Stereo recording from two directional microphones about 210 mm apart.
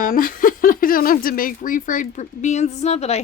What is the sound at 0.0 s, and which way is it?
Speech, 40° left (ahead or behind).